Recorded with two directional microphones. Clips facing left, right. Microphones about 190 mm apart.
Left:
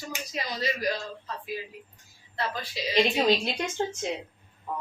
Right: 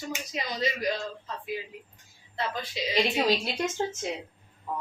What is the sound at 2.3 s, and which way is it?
Speech, 20° right (ahead or behind).